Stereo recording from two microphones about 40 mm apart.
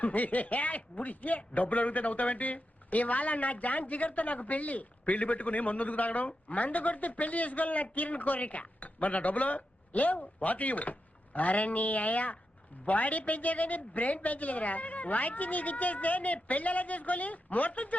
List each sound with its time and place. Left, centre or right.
0.0 s a man's voice: left